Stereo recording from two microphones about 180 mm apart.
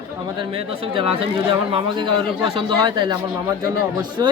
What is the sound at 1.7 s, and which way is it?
Speech, 30° right (ahead or behind).